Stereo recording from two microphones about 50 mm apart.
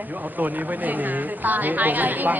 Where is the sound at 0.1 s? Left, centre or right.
Right.